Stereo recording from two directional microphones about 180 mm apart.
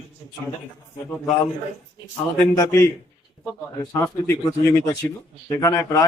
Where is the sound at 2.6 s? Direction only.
15° left (ahead or behind).